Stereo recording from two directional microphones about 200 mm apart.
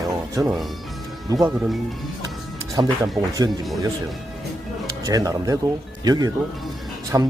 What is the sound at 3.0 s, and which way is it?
Speech, 20° right (ahead or behind).